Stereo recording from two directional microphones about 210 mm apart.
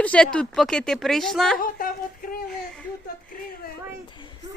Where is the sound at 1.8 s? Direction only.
40° left (ahead or behind).